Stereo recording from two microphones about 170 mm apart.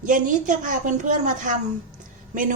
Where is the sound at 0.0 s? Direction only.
50° right (ahead or behind).